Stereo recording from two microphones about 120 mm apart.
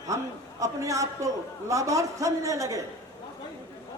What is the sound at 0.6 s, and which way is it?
A man's voice, 25° right (ahead or behind).